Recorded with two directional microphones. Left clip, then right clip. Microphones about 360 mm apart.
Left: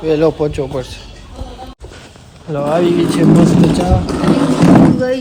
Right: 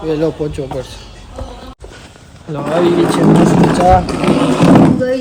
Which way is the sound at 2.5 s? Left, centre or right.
Centre.